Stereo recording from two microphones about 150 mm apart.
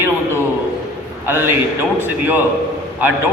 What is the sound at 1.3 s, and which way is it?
Speech, 15° right (ahead or behind).